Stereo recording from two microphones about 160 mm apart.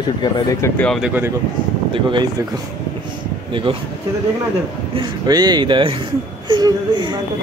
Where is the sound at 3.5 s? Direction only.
30° right (ahead or behind).